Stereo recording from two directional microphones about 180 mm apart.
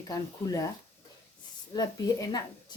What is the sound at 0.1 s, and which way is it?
Speech, 20° left (ahead or behind).